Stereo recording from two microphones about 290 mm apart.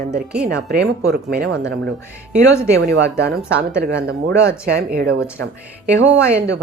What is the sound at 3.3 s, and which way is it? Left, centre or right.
Speech, centre.